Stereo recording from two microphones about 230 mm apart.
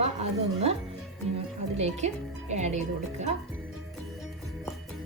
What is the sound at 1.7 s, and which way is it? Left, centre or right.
Speech, right.